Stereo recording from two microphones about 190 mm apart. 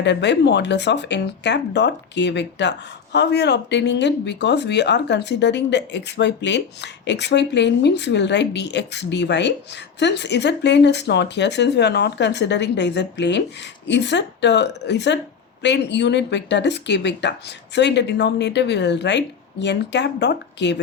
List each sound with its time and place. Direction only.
0.0 s speech: 65° left (ahead or behind)